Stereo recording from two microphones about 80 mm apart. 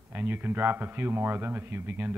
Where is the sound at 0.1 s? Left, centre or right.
Right.